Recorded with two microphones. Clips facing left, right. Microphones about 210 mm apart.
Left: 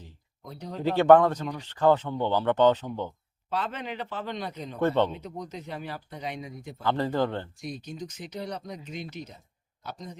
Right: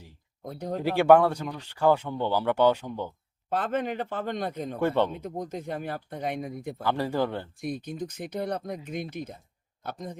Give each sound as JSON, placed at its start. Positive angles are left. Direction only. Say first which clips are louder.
{"t": 0.4, "sound": "speech", "louder": "right 6 dB", "side_deg": -50}
{"t": 0.9, "sound": "speech", "louder": "left 1 dB", "side_deg": -10}
{"t": 3.5, "sound": "speech", "louder": "right 4 dB", "side_deg": -50}
{"t": 4.8, "sound": "speech", "louder": "left 1 dB", "side_deg": -10}
{"t": 5.1, "sound": "speech", "louder": "right 4 dB", "side_deg": -50}
{"t": 6.8, "sound": "speech", "louder": "left 1 dB", "side_deg": -10}
{"t": 7.6, "sound": "speech", "louder": "right 4 dB", "side_deg": -55}